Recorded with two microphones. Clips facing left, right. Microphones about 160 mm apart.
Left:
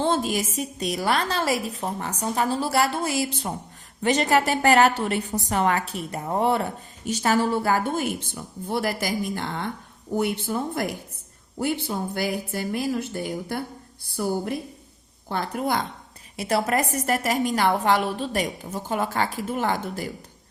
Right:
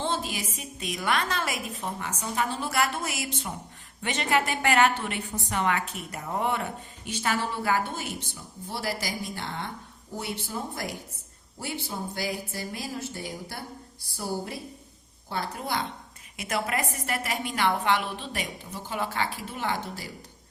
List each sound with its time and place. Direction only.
0.0 s a woman's voice: 50° left (ahead or behind)
12.1 s a woman's voice: 55° left (ahead or behind)
16.4 s a woman's voice: 35° left (ahead or behind)